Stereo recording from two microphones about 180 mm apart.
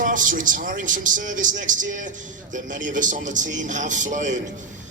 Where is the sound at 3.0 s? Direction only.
45° right (ahead or behind).